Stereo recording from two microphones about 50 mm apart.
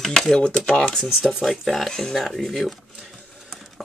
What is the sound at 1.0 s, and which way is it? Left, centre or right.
Speech, centre.